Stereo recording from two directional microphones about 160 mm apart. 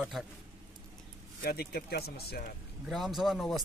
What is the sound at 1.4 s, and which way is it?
Speech, 75° left (ahead or behind).